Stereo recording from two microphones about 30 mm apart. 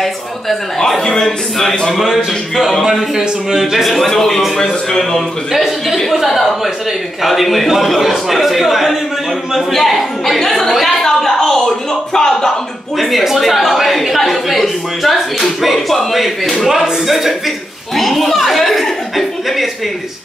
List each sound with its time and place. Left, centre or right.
0.0 s speech: centre
2.0 s a man's voice: centre
3.2 s speech: centre
3.8 s a man's voice: centre
5.5 s a man's voice: centre
11.0 s a sound: centre
13.0 s a man's voice: centre
17.9 s a man's voice: centre
18.3 s chuckle: centre